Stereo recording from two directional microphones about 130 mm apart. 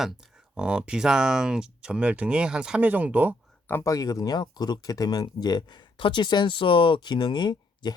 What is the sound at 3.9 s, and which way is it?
Speech, 30° left (ahead or behind).